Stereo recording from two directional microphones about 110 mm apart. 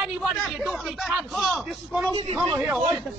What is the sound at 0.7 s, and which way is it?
A man's voice, centre (ahead or behind).